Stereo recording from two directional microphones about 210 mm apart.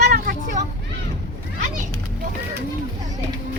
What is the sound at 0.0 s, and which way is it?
Children playing, 45° right (ahead or behind).